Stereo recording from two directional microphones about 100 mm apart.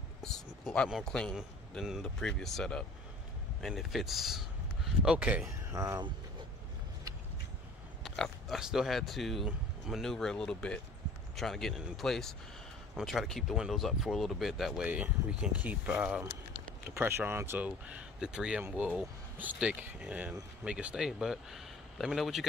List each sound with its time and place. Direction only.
0.2 s a sound: 5° left (ahead or behind)
1.0 s speech: 10° left (ahead or behind)
1.3 s a man's voice: 5° right (ahead or behind)
2.1 s speech: 5° left (ahead or behind); by 5.4 s 10° right (ahead or behind)
5.7 s speech: 30° right (ahead or behind)
8.0 s speech: centre (ahead or behind)
14.9 s speech: 10° right (ahead or behind)
16.8 s a man's voice: 25° right (ahead or behind); by 22.5 s centre (ahead or behind)